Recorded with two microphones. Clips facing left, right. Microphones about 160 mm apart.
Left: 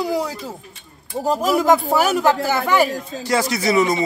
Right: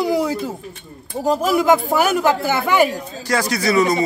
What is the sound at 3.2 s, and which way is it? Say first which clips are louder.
Speech: even; 25° left (ahead or behind).